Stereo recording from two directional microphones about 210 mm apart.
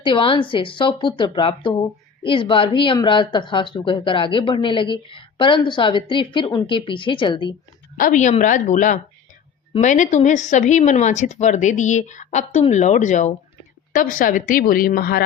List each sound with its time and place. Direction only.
0.0 s speech: 25° left (ahead or behind)
7.9 s speech: 40° left (ahead or behind)